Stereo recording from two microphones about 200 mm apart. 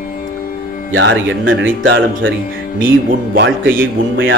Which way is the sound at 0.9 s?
70° right (ahead or behind).